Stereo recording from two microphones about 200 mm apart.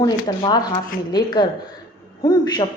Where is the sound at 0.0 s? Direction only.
20° left (ahead or behind).